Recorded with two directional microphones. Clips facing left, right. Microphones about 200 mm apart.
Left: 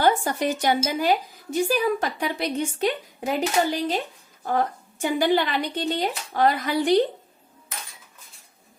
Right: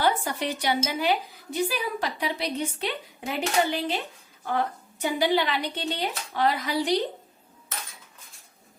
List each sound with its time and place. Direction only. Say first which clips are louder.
0.0 s a woman's voice: left 4 dB; 45° left (ahead or behind)